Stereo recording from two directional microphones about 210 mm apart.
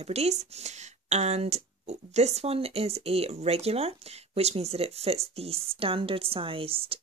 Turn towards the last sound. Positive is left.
turn(degrees=-25)  # may be behind; listen again after turning